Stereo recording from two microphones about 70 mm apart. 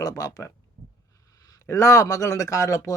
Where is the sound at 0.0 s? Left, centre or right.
Left.